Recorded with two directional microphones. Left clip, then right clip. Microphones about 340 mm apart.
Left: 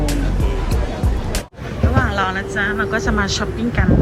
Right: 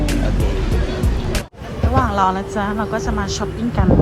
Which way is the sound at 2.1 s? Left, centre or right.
Centre.